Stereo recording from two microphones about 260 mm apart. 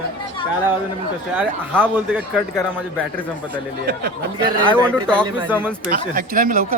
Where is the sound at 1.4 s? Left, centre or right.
Centre.